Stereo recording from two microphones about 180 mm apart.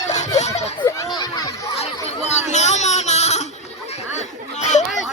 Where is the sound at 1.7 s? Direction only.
35° left (ahead or behind).